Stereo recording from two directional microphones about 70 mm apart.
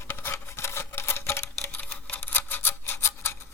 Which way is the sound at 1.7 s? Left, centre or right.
Left.